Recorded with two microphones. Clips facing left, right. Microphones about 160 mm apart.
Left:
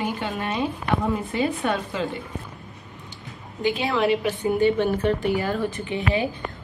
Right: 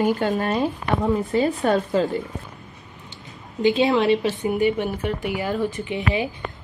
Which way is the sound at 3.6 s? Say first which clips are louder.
Right 5 dB; 20° right (ahead or behind).